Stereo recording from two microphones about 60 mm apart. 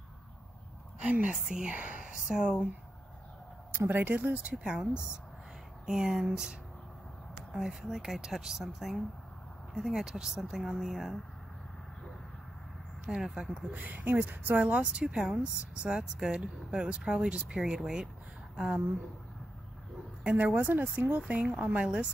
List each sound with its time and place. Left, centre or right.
0.9 s a woman's voice: right
3.9 s speech: right
5.9 s speech: centre
7.5 s speech: centre
13.0 s speech: centre
13.7 s speech: right
14.6 s speech: centre
20.2 s speech: right